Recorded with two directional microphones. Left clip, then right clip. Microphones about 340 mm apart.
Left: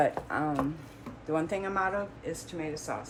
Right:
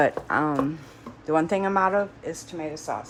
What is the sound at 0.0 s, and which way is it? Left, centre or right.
A woman's voice, right.